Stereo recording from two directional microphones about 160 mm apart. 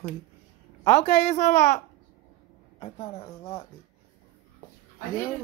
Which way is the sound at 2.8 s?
40° left (ahead or behind).